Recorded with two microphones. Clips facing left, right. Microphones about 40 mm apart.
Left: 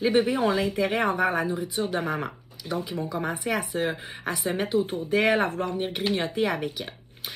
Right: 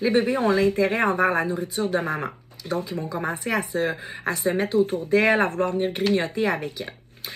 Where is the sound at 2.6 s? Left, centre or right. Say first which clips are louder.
Right 3 dB; centre.